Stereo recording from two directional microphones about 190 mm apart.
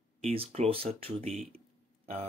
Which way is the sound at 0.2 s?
30° right (ahead or behind).